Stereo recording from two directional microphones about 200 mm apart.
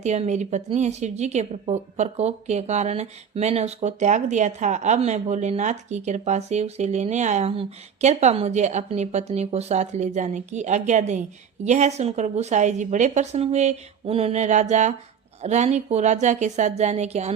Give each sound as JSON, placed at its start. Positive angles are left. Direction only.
{"t": 0.0, "sound": "a woman's voice", "side_deg": -35}